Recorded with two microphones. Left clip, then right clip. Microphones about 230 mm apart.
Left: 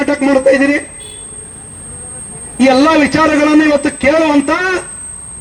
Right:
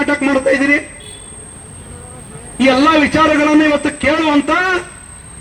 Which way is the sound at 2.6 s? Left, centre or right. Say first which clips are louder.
Left 2 dB; left.